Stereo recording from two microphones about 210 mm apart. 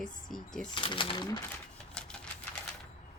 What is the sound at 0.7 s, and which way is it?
Speech, 25° left (ahead or behind).